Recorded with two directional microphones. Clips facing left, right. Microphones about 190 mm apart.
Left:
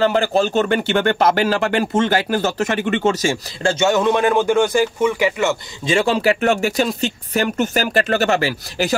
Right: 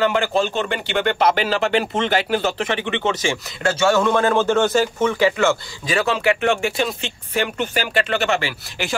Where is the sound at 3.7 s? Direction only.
20° left (ahead or behind).